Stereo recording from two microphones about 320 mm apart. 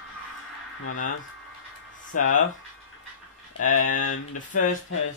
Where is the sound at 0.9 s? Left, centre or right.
Left.